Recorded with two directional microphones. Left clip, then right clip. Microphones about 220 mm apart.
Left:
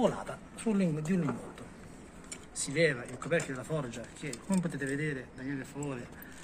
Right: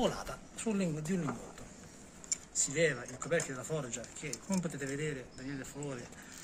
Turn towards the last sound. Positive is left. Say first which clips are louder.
# left 4 dB
turn(degrees=-10)  # may be behind; listen again after turning